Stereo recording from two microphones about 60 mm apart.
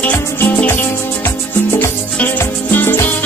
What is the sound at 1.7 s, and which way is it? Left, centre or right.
Music, left.